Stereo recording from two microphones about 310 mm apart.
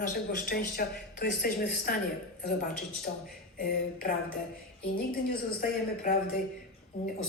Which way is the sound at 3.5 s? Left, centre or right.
Left.